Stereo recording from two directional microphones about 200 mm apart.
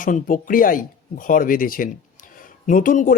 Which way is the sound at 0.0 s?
45° left (ahead or behind).